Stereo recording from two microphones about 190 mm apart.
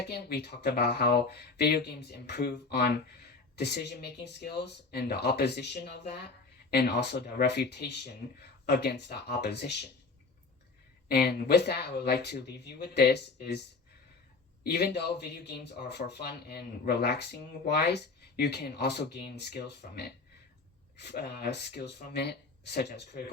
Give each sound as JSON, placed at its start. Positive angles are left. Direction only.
{"t": 0.0, "sound": "speech", "side_deg": 60}
{"t": 11.1, "sound": "speech", "side_deg": 55}